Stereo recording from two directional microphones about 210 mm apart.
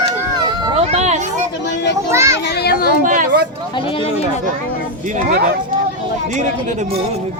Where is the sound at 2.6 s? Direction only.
45° left (ahead or behind).